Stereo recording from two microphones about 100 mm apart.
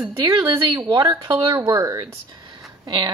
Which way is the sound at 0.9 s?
30° right (ahead or behind).